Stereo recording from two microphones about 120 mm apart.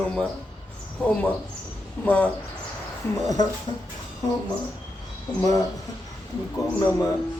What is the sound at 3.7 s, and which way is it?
Speech, 45° left (ahead or behind).